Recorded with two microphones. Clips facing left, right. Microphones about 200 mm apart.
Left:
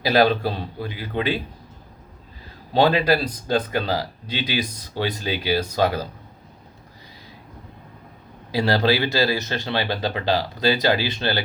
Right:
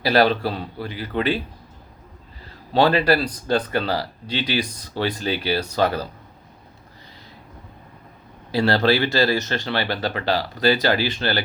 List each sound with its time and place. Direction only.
0.0 s speech: 15° left (ahead or behind)
2.7 s speech: 15° left (ahead or behind)
8.5 s speech: 15° left (ahead or behind)